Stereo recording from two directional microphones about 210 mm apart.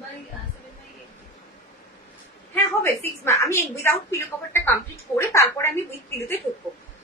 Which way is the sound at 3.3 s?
15° left (ahead or behind).